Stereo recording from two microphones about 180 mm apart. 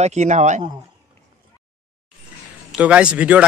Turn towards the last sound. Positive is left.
turn(degrees=-5)  # may be behind; listen again after turning